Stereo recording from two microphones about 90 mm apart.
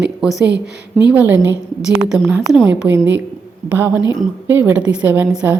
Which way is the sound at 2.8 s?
15° right (ahead or behind).